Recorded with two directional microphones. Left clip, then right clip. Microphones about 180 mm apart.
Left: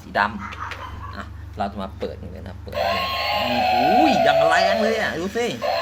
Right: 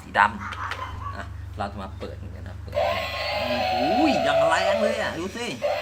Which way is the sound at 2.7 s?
40° left (ahead or behind).